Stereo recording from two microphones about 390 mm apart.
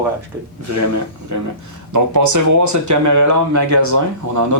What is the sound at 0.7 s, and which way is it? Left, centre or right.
Speech, right.